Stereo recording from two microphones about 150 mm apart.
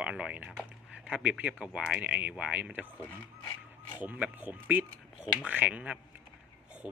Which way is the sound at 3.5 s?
30° left (ahead or behind).